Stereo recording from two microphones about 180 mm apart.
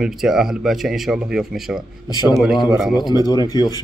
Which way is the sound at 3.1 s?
20° left (ahead or behind).